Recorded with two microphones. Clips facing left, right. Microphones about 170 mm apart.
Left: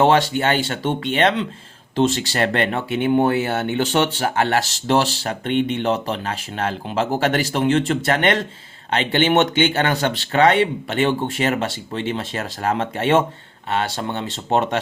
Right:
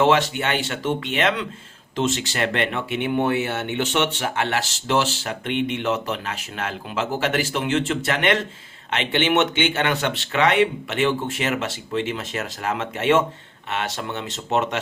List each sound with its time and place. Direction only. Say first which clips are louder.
0.0 s speech: left 3 dB; 35° left (ahead or behind)